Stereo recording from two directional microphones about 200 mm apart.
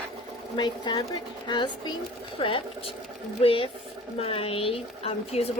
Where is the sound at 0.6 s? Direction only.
20° left (ahead or behind).